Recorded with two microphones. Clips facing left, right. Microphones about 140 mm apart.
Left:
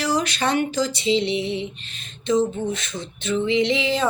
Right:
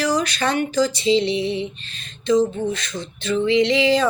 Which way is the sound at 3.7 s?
85° right.